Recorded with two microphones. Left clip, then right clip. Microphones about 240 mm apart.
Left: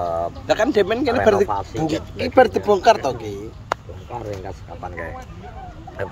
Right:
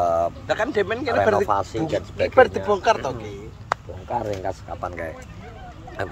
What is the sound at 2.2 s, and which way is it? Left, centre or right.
Speech, left.